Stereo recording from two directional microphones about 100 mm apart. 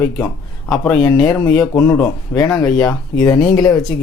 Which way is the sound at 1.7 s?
30° left (ahead or behind).